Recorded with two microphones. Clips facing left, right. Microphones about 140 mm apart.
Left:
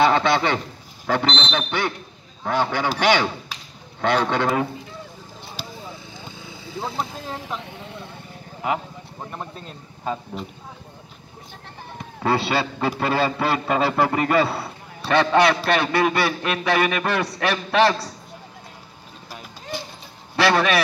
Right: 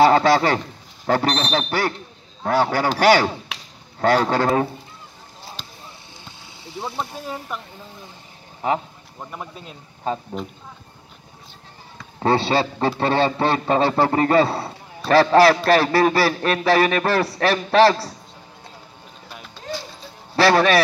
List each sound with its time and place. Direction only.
0.0 s a man's voice: 40° right (ahead or behind)
7.6 s speech: 80° left
9.2 s speech: centre (ahead or behind)
12.2 s a man's voice: 30° right (ahead or behind)
20.3 s a man's voice: 30° right (ahead or behind)